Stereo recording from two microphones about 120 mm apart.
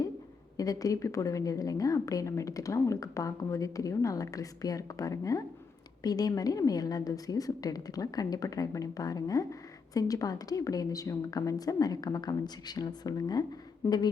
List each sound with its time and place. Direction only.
0.5 s a woman's voice: 30° left (ahead or behind)